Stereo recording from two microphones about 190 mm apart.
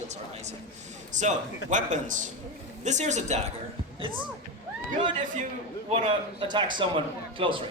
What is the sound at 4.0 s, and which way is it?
Speech, 25° right (ahead or behind).